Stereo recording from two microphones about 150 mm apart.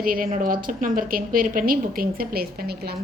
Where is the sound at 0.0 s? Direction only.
75° right (ahead or behind).